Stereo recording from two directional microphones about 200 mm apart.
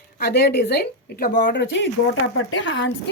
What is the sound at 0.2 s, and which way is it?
Speech, 55° left (ahead or behind).